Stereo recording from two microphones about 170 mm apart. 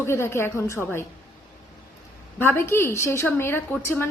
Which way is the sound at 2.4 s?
15° left (ahead or behind).